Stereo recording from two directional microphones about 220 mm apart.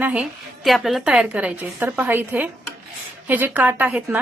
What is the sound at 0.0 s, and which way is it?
A woman's voice, 5° right (ahead or behind).